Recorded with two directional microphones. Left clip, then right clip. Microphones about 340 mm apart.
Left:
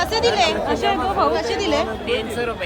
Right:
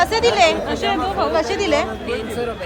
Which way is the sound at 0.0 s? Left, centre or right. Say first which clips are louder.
Right 3 dB; centre.